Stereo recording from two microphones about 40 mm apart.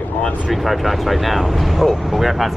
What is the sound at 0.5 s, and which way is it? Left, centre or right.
Speech, centre.